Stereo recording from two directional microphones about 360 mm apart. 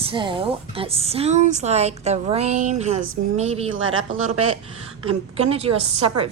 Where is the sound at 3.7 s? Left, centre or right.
Right.